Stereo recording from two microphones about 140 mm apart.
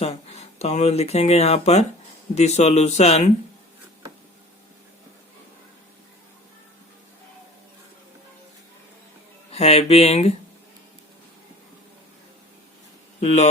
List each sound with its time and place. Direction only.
0.0 s speech: 45° left (ahead or behind)
9.5 s speech: 50° left (ahead or behind)
13.1 s speech: 55° left (ahead or behind)